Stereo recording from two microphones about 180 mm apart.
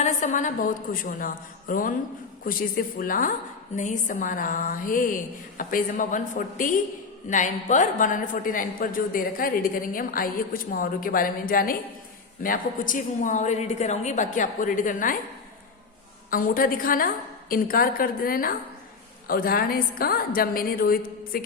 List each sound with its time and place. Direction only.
0.0 s a woman's voice: 45° left (ahead or behind)
16.3 s a woman's voice: 50° left (ahead or behind)